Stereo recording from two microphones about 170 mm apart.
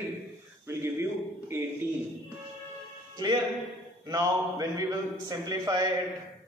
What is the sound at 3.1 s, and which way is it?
A man's voice, 25° right (ahead or behind).